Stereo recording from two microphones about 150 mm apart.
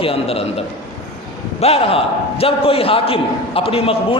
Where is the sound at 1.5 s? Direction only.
40° left (ahead or behind).